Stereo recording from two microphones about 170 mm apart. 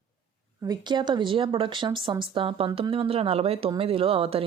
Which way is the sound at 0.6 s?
25° right (ahead or behind).